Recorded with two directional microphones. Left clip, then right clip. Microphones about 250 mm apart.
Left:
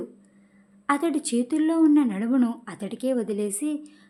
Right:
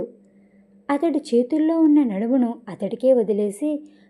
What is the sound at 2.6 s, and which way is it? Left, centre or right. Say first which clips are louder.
Speech: right 10 dB; centre.